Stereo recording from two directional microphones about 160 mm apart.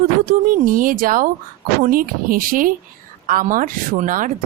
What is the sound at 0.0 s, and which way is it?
Speech, 60° right (ahead or behind).